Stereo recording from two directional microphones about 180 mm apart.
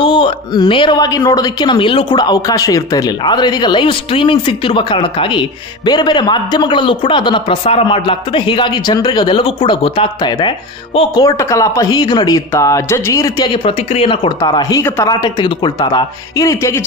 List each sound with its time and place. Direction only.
0.0 s a woman's voice: 25° left (ahead or behind)